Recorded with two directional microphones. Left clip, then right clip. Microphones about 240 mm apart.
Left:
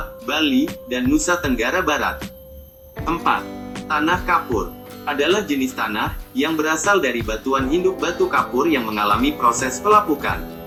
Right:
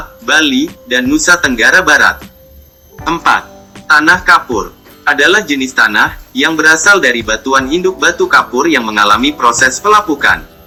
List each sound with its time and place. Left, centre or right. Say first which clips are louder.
0.3 s speech: right 10 dB; right